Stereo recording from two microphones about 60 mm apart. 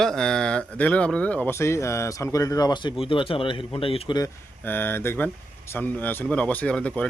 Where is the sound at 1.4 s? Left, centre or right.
Left.